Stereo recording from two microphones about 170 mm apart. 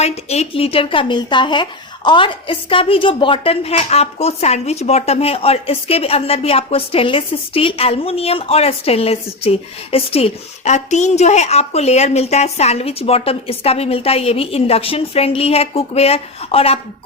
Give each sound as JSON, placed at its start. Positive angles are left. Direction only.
{"t": 0.0, "sound": "a woman's voice", "side_deg": 40}